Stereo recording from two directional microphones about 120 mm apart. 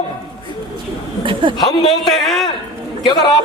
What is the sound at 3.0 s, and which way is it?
Speech, 35° left (ahead or behind).